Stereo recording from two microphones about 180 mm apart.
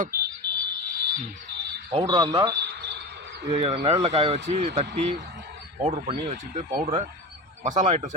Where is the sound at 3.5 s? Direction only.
35° right (ahead or behind).